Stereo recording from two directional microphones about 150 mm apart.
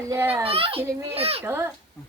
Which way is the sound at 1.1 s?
40° right (ahead or behind).